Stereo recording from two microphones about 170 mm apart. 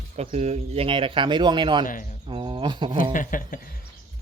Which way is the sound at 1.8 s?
50° left (ahead or behind).